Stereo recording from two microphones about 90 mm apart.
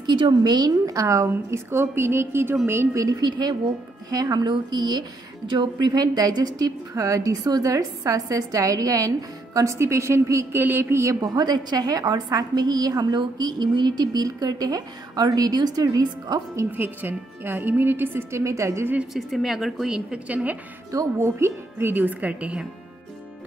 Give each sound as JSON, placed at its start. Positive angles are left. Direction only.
{"t": 0.0, "sound": "a woman's voice", "side_deg": -60}
{"t": 3.2, "sound": "a woman's voice", "side_deg": -50}
{"t": 11.1, "sound": "a woman's voice", "side_deg": -50}
{"t": 16.7, "sound": "a woman's voice", "side_deg": -20}
{"t": 19.1, "sound": "a woman's voice", "side_deg": 0}
{"t": 20.9, "sound": "a woman's voice", "side_deg": -35}